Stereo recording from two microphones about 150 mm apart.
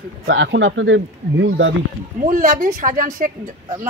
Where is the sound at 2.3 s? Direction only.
60° right (ahead or behind).